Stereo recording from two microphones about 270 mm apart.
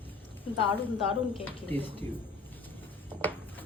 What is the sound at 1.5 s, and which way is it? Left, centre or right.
Speech, centre.